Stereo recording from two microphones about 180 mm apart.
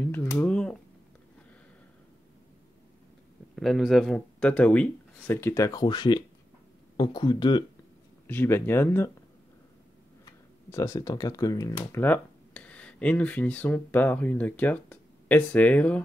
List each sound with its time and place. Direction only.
0.0 s a sound: 10° left (ahead or behind)
3.5 s speech: centre (ahead or behind); by 7.6 s 25° left (ahead or behind)
8.3 s speech: 10° left (ahead or behind)
10.2 s speech: 15° left (ahead or behind)